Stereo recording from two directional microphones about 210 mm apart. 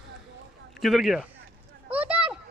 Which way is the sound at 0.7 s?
Centre (ahead or behind).